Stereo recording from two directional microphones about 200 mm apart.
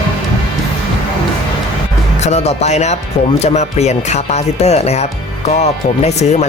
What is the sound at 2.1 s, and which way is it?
Speech, 35° left (ahead or behind).